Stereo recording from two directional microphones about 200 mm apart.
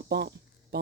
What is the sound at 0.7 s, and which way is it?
Music, 50° right (ahead or behind).